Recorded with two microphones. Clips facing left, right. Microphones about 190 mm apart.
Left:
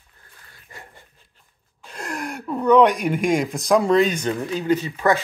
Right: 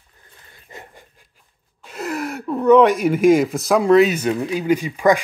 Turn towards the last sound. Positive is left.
turn(degrees=-15)  # may be behind; listen again after turning